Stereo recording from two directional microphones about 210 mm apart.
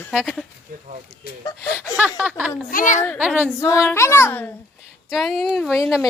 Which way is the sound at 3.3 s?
10° left (ahead or behind).